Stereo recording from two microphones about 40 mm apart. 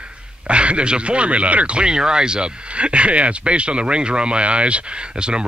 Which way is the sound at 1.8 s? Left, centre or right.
Centre.